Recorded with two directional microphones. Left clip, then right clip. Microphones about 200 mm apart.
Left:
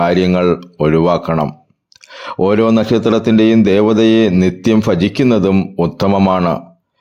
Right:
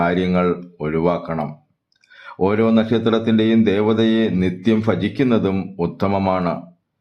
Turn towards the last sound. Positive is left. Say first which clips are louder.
# left 6 dB
turn(degrees=35)  # may be behind; listen again after turning